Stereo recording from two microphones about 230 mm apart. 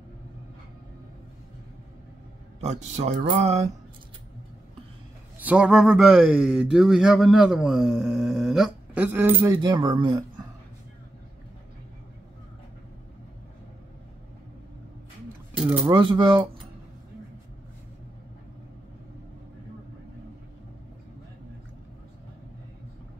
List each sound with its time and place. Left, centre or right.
2.6 s speech: right
5.4 s speech: centre
15.5 s a sound: centre
15.8 s speech: centre